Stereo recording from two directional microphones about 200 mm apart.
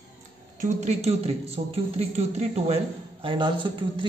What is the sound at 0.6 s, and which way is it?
Speech, 35° right (ahead or behind).